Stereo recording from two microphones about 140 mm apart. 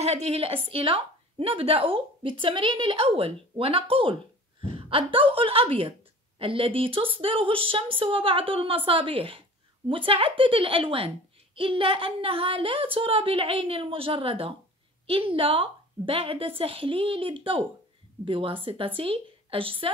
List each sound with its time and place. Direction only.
0.0 s a woman's voice: 50° right (ahead or behind)